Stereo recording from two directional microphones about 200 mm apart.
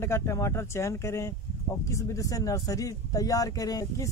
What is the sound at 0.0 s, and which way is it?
Speech, 15° left (ahead or behind).